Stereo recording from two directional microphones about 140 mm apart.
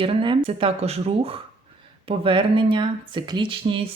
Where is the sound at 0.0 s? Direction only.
40° right (ahead or behind).